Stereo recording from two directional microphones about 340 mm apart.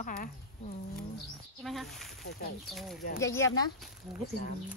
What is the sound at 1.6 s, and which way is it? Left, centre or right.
Speech, centre.